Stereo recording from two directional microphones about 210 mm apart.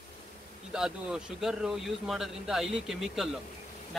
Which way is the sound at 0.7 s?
5° right (ahead or behind).